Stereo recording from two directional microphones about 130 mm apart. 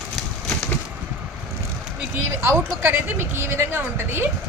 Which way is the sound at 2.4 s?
20° right (ahead or behind).